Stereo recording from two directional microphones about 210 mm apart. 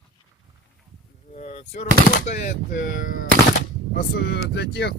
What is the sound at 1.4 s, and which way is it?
Speech, 35° left (ahead or behind).